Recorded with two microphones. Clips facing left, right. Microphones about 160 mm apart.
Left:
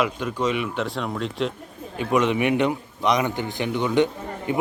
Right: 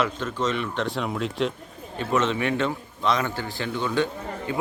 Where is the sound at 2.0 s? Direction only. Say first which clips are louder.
Left 3 dB; 15° left (ahead or behind).